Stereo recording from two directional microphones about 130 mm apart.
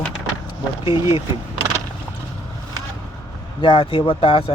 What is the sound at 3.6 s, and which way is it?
Speech, 40° left (ahead or behind).